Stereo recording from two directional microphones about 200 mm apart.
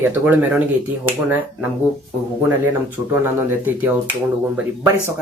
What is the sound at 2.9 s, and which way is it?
Speech, 10° right (ahead or behind).